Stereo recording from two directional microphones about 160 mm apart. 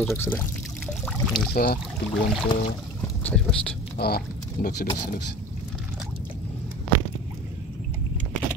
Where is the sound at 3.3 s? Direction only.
5° left (ahead or behind).